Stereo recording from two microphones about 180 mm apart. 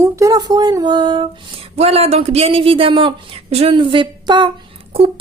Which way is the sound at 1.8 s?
35° right (ahead or behind).